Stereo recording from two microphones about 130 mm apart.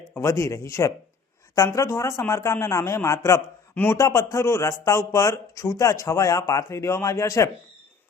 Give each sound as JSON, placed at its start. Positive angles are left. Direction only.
{"t": 0.1, "sound": "a man's voice", "side_deg": 20}